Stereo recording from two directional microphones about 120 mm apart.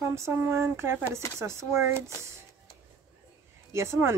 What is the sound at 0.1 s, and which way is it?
A woman's voice, 20° right (ahead or behind).